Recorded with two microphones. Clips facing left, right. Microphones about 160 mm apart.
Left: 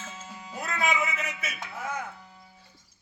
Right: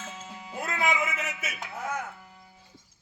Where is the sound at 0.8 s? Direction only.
15° right (ahead or behind).